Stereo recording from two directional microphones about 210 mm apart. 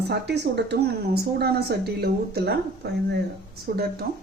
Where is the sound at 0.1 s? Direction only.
55° right (ahead or behind).